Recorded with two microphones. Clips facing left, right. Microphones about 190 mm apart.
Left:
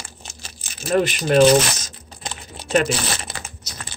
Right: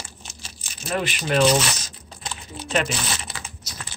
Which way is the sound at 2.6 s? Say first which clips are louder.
Left 5 dB; 40° left (ahead or behind).